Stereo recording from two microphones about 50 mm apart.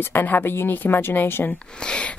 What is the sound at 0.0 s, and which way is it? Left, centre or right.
Speech, left.